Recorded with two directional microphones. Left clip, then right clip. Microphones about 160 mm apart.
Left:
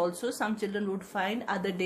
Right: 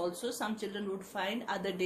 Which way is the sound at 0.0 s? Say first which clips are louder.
Left 5 dB; 65° left (ahead or behind).